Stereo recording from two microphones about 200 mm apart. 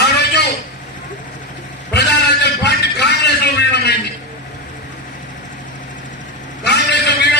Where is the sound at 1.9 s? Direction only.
55° left (ahead or behind).